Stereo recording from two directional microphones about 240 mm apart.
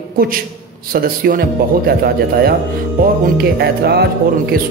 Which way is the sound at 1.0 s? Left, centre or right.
Right.